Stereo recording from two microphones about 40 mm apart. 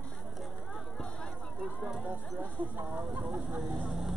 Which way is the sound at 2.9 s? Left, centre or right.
Centre.